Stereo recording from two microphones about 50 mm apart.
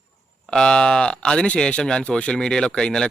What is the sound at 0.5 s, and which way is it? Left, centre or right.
Speech, centre.